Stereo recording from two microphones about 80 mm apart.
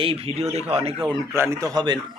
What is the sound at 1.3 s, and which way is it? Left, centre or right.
Speech, right.